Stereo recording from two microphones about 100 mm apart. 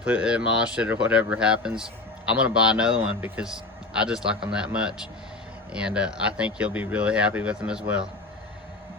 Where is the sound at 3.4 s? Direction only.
5° right (ahead or behind).